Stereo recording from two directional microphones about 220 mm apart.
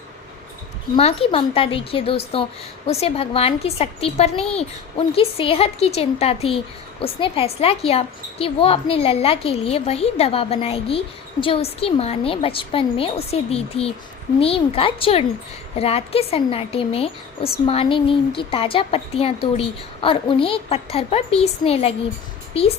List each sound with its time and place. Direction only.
0.9 s a woman's voice: 25° left (ahead or behind)